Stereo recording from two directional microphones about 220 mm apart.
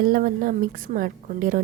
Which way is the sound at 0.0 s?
40° right (ahead or behind).